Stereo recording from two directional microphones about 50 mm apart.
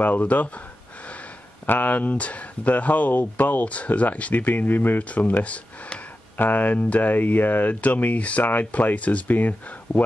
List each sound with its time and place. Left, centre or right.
0.0 s speech: left
1.7 s speech: left